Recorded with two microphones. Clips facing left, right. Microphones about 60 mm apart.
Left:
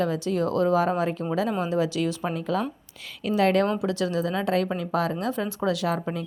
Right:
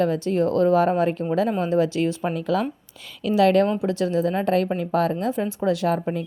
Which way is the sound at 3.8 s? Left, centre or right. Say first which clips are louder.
Right 4 dB; right.